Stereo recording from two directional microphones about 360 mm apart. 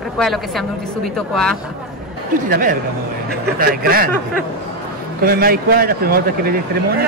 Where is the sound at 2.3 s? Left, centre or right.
Right.